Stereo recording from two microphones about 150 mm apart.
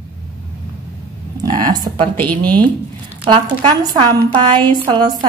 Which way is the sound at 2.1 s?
10° left (ahead or behind).